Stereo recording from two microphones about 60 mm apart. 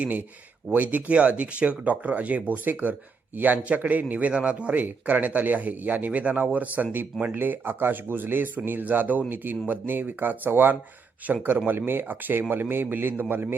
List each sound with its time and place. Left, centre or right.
0.0 s speech: right